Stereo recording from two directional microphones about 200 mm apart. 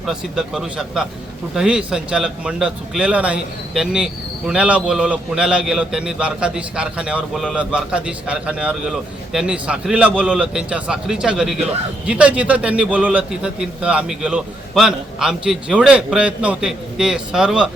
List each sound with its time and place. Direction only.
0.0 s speech: 5° right (ahead or behind)